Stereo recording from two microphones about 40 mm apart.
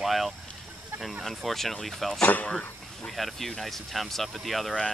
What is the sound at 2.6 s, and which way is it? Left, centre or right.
Speech, centre.